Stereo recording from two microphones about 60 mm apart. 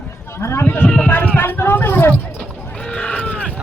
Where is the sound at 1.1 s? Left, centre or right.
Left.